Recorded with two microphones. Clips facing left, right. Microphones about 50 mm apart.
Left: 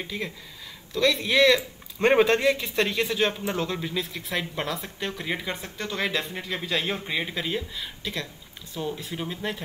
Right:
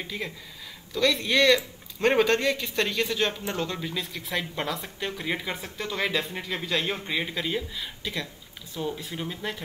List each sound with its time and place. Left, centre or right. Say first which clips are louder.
0.0 s speech: left 1 dB; centre